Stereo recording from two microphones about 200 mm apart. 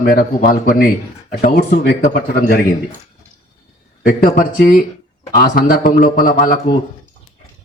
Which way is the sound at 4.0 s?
45° left (ahead or behind).